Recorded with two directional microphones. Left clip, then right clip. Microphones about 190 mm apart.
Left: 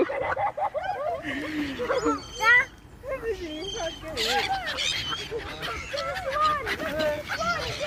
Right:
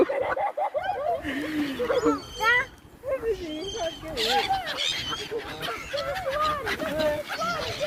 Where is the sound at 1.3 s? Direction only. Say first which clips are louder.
Right 2 dB; 60° right (ahead or behind).